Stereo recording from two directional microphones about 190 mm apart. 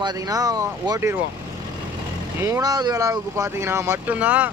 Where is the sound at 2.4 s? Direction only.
15° right (ahead or behind).